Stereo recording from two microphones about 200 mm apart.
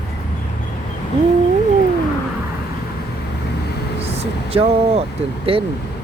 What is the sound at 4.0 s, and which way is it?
Speech, 30° right (ahead or behind).